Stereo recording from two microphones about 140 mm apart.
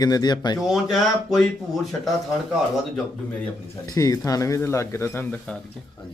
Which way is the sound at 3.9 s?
25° left (ahead or behind).